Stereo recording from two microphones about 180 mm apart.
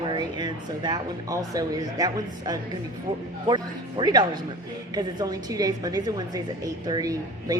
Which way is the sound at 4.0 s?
25° right (ahead or behind).